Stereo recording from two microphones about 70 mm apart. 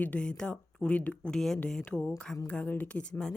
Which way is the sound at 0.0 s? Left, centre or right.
Centre.